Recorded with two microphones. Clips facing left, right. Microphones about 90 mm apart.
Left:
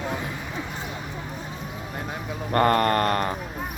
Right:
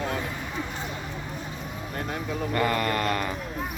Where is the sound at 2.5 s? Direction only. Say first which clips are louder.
Left 7 dB; 50° left (ahead or behind).